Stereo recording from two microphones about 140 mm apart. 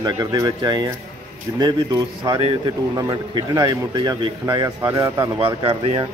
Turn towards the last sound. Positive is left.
turn(degrees=-40)  # may be behind; listen again after turning